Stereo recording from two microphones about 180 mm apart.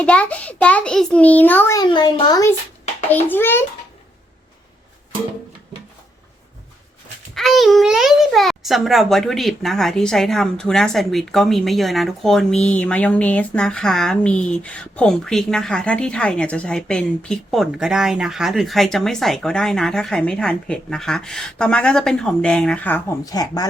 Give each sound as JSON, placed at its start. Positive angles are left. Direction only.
{"t": 0.0, "sound": "a child's voice", "side_deg": 5}
{"t": 7.3, "sound": "a woman's voice", "side_deg": 0}
{"t": 23.2, "sound": "speech", "side_deg": 20}